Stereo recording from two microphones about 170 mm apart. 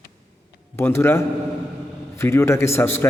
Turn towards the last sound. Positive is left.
turn(degrees=15)  # may be behind; listen again after turning